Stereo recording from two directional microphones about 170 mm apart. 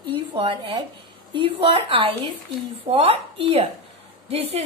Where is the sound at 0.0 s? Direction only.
30° right (ahead or behind).